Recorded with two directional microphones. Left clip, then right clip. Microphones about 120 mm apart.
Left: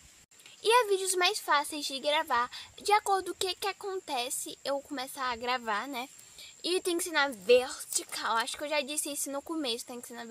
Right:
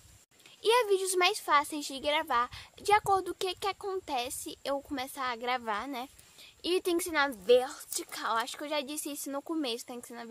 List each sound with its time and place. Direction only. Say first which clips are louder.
0.6 s a child's voice: left 1 dB; 45° right (ahead or behind)